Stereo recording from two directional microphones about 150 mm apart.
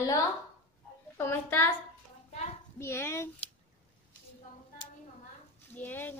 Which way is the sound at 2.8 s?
15° left (ahead or behind).